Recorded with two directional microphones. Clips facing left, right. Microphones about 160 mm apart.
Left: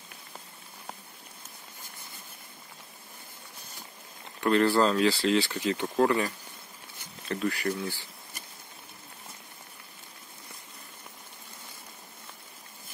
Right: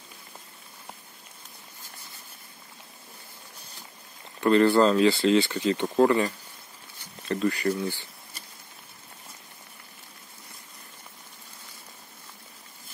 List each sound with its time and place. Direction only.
4.4 s speech: centre (ahead or behind)